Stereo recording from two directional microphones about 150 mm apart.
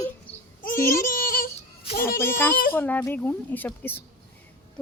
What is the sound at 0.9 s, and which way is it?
Yodeling, 70° left (ahead or behind).